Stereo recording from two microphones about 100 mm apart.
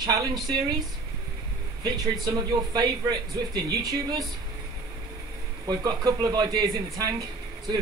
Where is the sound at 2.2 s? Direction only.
35° right (ahead or behind).